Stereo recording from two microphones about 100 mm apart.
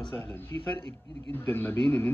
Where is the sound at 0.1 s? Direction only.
20° left (ahead or behind).